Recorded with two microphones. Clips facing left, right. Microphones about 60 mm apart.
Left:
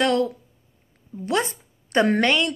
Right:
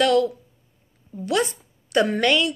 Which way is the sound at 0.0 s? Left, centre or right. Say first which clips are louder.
Right 2 dB; left.